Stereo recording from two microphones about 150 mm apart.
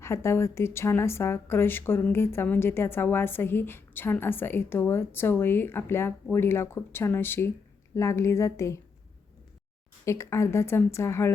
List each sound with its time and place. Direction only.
0.0 s a woman's voice: 20° left (ahead or behind)
10.1 s speech: 20° left (ahead or behind)